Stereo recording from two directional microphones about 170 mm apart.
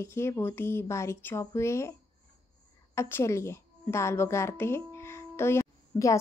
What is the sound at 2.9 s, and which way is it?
A woman's voice, 15° left (ahead or behind).